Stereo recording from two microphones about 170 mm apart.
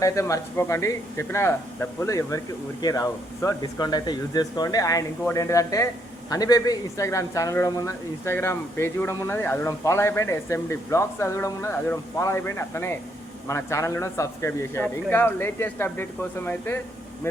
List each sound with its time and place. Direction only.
0.0 s a man's voice: 20° left (ahead or behind)